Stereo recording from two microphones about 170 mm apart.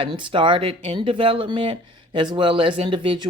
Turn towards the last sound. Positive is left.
turn(degrees=-30)  # may be behind; listen again after turning